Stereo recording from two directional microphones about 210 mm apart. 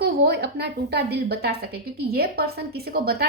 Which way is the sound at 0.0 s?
50° right (ahead or behind).